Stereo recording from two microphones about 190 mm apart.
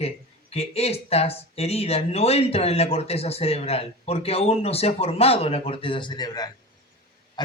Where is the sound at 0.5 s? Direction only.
30° left (ahead or behind).